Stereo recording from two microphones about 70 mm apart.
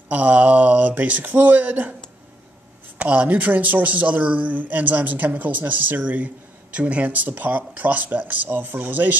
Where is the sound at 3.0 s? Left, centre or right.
Right.